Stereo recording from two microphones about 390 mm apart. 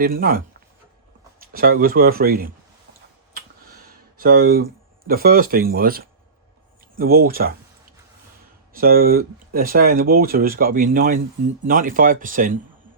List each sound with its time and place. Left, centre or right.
0.0 s speech: right
4.2 s speech: right
8.7 s speech: right